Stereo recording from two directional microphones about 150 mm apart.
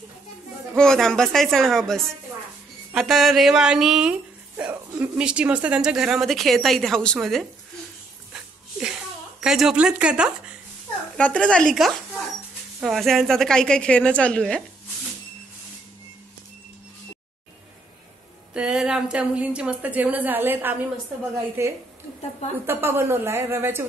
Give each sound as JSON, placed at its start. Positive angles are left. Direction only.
{"t": 0.7, "sound": "speech", "side_deg": 5}
{"t": 8.3, "sound": "a sound", "side_deg": -5}
{"t": 11.1, "sound": "speech", "side_deg": 10}
{"t": 18.5, "sound": "a woman's voice", "side_deg": -5}